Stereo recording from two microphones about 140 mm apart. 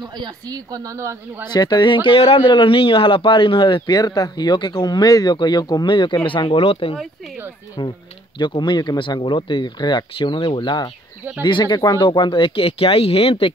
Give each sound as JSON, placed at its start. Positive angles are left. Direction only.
{"t": 0.0, "sound": "speech", "side_deg": -30}
{"t": 1.5, "sound": "a man's voice", "side_deg": 30}